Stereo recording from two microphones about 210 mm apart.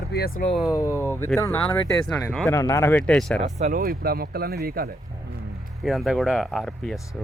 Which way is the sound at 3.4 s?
35° right (ahead or behind).